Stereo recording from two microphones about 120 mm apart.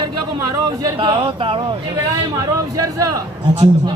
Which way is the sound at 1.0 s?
45° right (ahead or behind).